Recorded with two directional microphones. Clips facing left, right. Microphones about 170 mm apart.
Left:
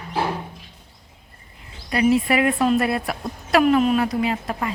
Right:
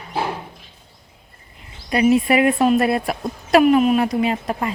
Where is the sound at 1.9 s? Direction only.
20° right (ahead or behind).